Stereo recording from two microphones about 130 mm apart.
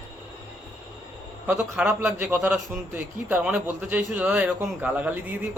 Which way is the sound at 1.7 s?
15° right (ahead or behind).